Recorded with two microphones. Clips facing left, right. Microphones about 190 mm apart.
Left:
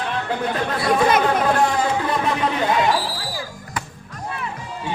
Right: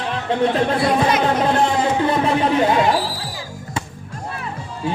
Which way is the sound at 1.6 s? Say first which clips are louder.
Right 2 dB; 30° right (ahead or behind).